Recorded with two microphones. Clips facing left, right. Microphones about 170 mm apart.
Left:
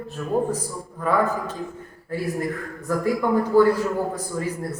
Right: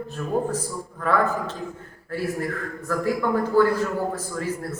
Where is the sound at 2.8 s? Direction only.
15° left (ahead or behind).